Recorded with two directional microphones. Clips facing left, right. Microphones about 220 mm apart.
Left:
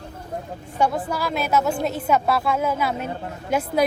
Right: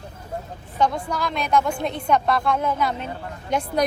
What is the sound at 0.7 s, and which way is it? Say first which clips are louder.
A woman's voice: even; 10° left (ahead or behind).